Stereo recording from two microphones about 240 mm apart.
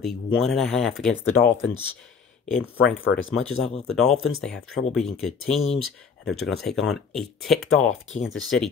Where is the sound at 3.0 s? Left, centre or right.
Left.